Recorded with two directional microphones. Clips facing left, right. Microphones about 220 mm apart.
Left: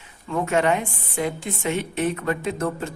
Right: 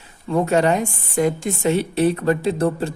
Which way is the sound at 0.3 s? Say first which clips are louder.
Right 4 dB; 35° right (ahead or behind).